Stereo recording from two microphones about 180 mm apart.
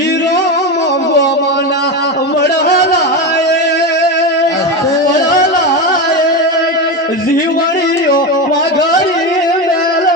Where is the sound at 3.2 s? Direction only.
70° left (ahead or behind).